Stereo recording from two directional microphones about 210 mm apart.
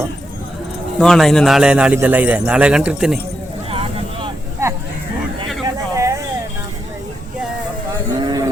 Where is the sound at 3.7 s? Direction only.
25° right (ahead or behind).